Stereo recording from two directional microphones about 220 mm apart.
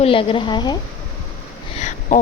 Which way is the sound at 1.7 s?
35° left (ahead or behind).